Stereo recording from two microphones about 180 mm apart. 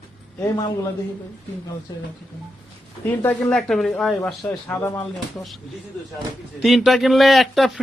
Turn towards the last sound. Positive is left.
turn(degrees=0)  # may be behind; listen again after turning